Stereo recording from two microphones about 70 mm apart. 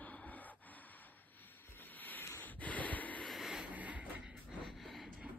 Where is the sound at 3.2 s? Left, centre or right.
Centre.